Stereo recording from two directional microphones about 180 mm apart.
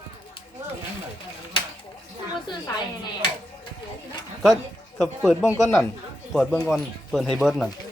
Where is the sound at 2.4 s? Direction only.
25° left (ahead or behind).